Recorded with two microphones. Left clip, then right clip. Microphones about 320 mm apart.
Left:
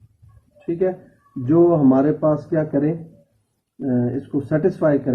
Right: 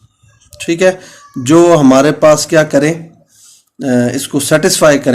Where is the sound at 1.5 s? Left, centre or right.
Right.